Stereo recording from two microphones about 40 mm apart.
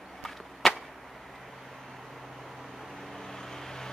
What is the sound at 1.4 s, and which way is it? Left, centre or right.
Vehicle, centre.